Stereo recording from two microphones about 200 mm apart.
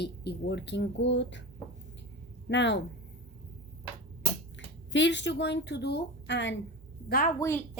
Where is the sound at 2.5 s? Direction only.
60° left (ahead or behind).